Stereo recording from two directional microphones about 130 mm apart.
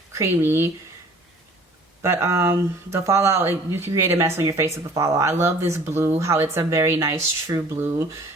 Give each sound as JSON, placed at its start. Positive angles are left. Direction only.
{"t": 0.1, "sound": "speech", "side_deg": -20}
{"t": 2.0, "sound": "speech", "side_deg": -20}